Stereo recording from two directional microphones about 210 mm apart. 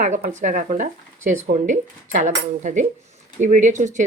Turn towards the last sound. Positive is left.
turn(degrees=-35)  # may be behind; listen again after turning